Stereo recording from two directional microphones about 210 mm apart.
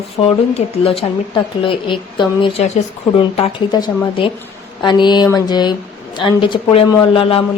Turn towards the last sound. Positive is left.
turn(degrees=25)  # may be behind; listen again after turning